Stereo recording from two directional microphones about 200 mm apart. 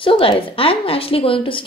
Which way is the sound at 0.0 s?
25° left (ahead or behind).